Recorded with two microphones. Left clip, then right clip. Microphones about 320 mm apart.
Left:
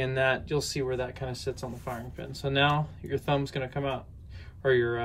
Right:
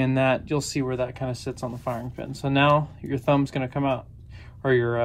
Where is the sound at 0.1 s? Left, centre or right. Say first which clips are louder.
Right 3 dB; centre.